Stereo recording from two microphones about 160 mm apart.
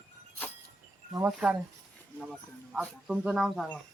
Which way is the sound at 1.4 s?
5° right (ahead or behind).